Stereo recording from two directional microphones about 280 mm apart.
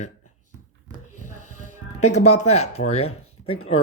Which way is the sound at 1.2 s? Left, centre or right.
Left.